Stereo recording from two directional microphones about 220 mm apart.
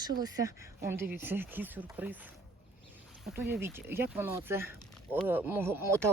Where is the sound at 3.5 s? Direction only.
10° right (ahead or behind).